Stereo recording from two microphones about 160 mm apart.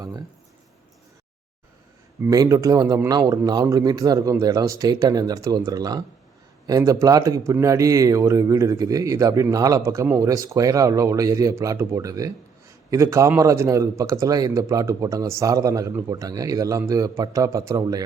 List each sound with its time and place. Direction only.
2.2 s a man's voice: 20° right (ahead or behind)